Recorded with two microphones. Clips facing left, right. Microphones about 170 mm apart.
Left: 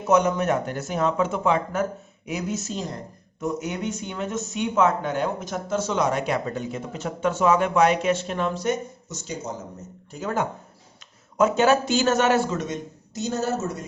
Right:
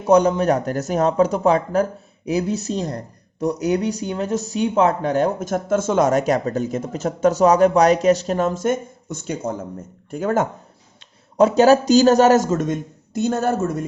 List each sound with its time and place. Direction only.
0.0 s speech: 35° right (ahead or behind); by 10.5 s 50° right (ahead or behind)
11.3 s speech: 35° right (ahead or behind); by 13.8 s 55° right (ahead or behind)